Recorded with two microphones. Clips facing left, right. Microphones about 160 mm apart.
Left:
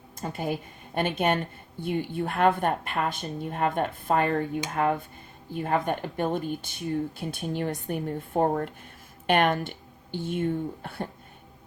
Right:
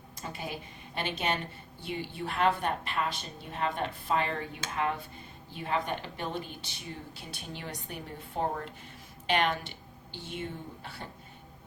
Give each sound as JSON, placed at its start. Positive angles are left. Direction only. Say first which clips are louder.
{"t": 0.2, "sound": "a woman's voice", "louder": "left 8 dB", "side_deg": 50}